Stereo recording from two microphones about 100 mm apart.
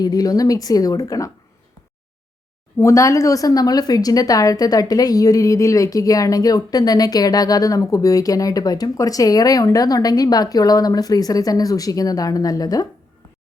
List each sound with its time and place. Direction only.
0.0 s speech: 40° left (ahead or behind)
2.7 s speech: 30° left (ahead or behind)